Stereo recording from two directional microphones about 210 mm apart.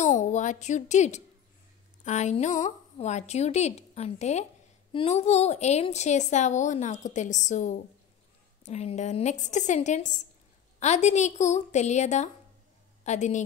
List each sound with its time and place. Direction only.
0.0 s a woman's voice: 35° left (ahead or behind)